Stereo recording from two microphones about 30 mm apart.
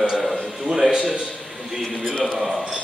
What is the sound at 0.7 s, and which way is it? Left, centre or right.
Speech, centre.